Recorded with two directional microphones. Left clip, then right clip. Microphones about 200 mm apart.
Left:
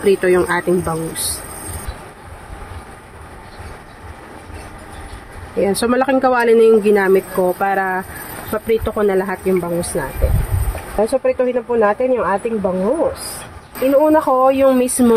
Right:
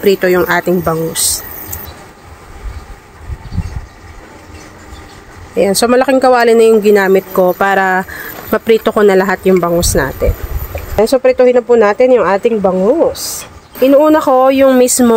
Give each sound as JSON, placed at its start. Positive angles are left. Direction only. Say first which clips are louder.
{"t": 0.0, "sound": "speech", "louder": "right 4 dB", "side_deg": -35}
{"t": 5.6, "sound": "speech", "louder": "right 6 dB", "side_deg": -40}
{"t": 13.9, "sound": "speech", "louder": "right 4 dB", "side_deg": -50}